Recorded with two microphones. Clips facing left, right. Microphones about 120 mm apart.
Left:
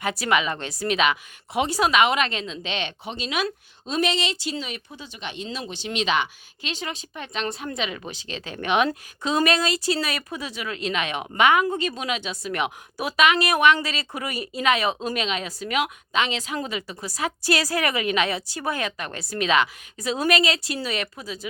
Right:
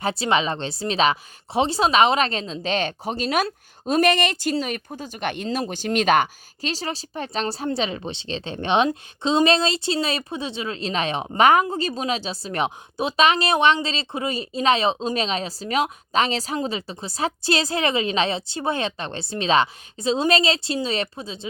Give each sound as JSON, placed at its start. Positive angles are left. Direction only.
{"t": 0.0, "sound": "a woman's voice", "side_deg": -30}